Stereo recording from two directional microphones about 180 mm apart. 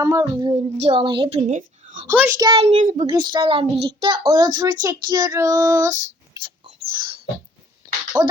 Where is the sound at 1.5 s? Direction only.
45° right (ahead or behind).